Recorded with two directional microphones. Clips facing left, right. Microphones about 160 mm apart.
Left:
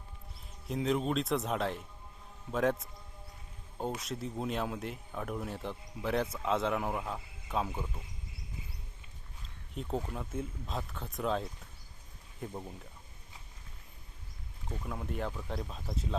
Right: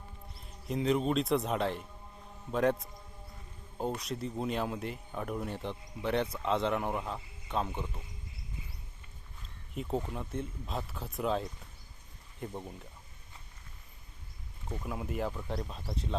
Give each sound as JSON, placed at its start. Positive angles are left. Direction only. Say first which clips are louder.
{"t": 0.3, "sound": "speech", "louder": "right 1 dB", "side_deg": 0}
{"t": 9.7, "sound": "speech", "louder": "right 2 dB", "side_deg": 0}
{"t": 14.7, "sound": "speech", "louder": "right 2 dB", "side_deg": -5}